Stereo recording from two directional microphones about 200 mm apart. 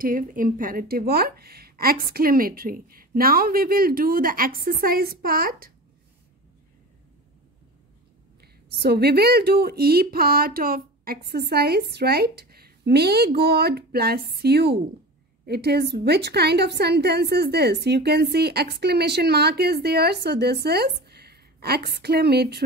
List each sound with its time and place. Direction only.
0.0 s speech: 45° right (ahead or behind)
8.4 s a woman's voice: 55° right (ahead or behind)